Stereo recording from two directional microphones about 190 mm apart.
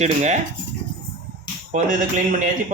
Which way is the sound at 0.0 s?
35° right (ahead or behind).